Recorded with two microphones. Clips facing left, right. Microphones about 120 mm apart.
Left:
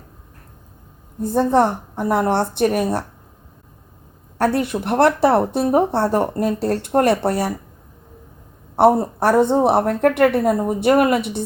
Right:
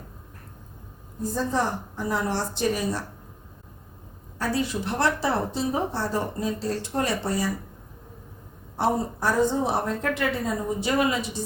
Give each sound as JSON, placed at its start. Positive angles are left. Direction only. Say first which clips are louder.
{"t": 1.2, "sound": "a woman's voice", "louder": "left 10 dB", "side_deg": 60}
{"t": 4.4, "sound": "a woman's voice", "louder": "left 8 dB", "side_deg": 60}
{"t": 8.7, "sound": "a woman's voice", "louder": "left 10 dB", "side_deg": 65}